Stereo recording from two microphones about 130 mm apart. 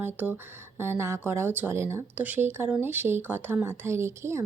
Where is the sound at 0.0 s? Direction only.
15° right (ahead or behind).